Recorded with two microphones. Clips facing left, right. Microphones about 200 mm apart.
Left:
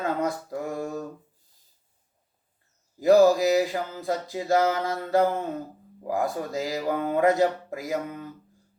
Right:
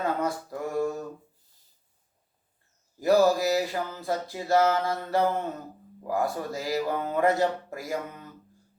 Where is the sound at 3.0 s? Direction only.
20° left (ahead or behind).